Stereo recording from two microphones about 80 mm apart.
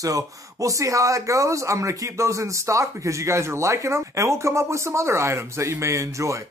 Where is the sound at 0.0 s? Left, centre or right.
Right.